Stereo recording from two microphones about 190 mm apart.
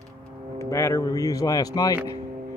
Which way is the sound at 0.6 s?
15° left (ahead or behind).